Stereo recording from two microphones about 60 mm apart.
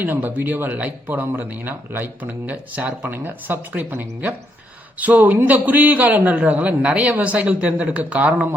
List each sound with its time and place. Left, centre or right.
0.0 s a man's voice: right